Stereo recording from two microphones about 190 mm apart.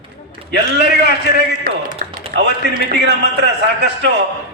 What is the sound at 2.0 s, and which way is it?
Speech, 50° right (ahead or behind).